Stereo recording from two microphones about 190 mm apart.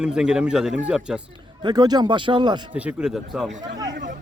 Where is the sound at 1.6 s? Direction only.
20° right (ahead or behind).